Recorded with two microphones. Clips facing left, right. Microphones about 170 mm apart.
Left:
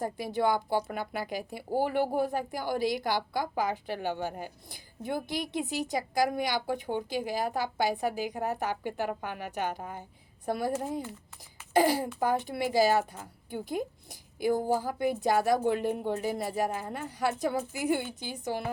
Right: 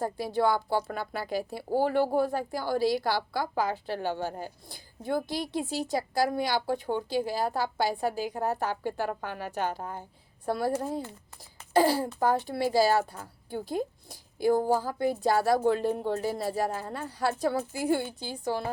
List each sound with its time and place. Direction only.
0.0 s a woman's voice: 20° left (ahead or behind)
8.3 s a woman's voice: 40° right (ahead or behind)
8.5 s a woman's voice: 15° left (ahead or behind)